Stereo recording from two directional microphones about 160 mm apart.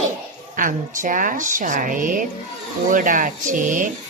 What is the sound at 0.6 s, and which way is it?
Speech, 55° right (ahead or behind).